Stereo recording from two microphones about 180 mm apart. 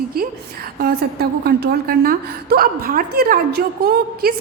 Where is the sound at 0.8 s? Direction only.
60° right (ahead or behind).